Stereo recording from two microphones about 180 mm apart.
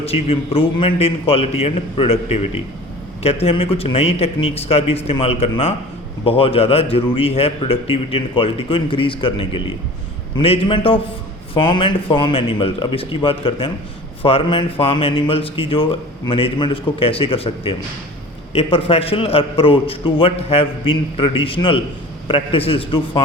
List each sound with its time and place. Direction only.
0.0 s speech: 35° left (ahead or behind)